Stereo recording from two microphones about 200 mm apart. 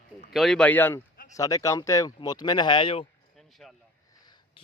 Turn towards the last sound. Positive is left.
turn(degrees=5)  # may be behind; listen again after turning